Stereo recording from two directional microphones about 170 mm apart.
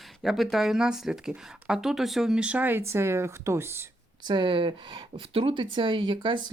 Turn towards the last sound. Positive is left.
turn(degrees=-25)  # may be behind; listen again after turning